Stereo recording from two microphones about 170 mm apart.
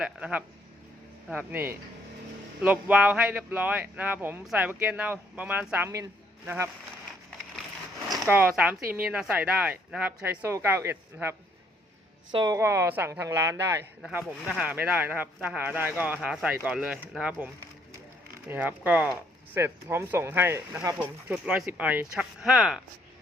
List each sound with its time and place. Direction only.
0.0 s speech: 10° right (ahead or behind)
2.6 s speech: 10° right (ahead or behind)
8.2 s speech: 10° right (ahead or behind)
12.3 s a woman's voice: 25° right (ahead or behind)
12.5 s speech: 15° right (ahead or behind)